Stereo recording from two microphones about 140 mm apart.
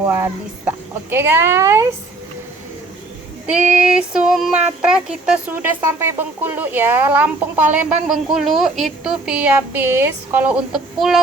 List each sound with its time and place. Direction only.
0.1 s speech: 20° right (ahead or behind)
1.1 s child singing: 15° right (ahead or behind)
3.4 s child singing: 5° right (ahead or behind)